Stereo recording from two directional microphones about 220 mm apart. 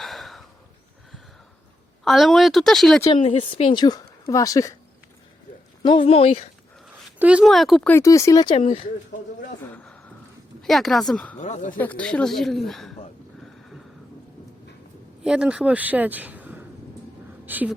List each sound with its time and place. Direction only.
0.0 s a sound: centre (ahead or behind)
2.0 s speech: centre (ahead or behind)
3.2 s a woman's voice: 30° left (ahead or behind); by 4.7 s 15° left (ahead or behind)
5.8 s a woman's voice: 25° left (ahead or behind)
6.8 s a woman's voice: 5° right (ahead or behind); by 8.6 s 20° left (ahead or behind)
9.7 s a sound: 5° left (ahead or behind)
10.6 s speech: centre (ahead or behind)
11.3 s speech: 30° left (ahead or behind)
11.8 s speech: 5° left (ahead or behind)
13.4 s a sound: centre (ahead or behind)
15.2 s speech: 5° right (ahead or behind)